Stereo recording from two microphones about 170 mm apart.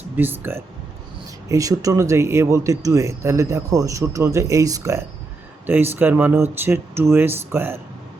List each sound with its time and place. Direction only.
0.2 s speech: 10° right (ahead or behind)